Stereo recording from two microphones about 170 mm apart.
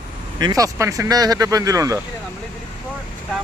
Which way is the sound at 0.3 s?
20° right (ahead or behind).